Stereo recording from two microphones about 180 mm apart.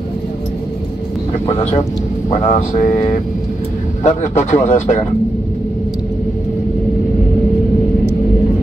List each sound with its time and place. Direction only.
2.5 s speech: 45° left (ahead or behind)